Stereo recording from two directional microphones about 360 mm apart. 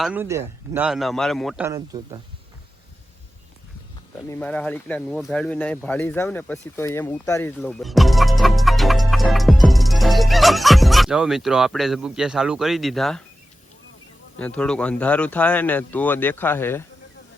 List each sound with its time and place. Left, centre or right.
0.0 s speech: centre
4.3 s speech: centre
14.3 s speech: centre